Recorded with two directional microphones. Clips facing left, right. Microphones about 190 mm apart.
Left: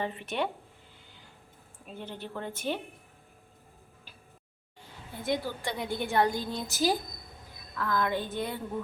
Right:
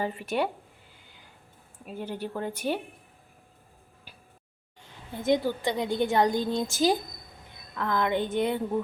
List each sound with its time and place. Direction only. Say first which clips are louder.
0.0 s speech: right 4 dB; 5° right (ahead or behind)
1.9 s a woman's voice: right 6 dB; 10° right (ahead or behind)
5.2 s a woman's voice: right 7 dB; 20° right (ahead or behind)